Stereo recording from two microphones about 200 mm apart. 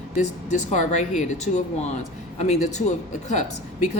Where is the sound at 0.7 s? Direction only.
35° left (ahead or behind).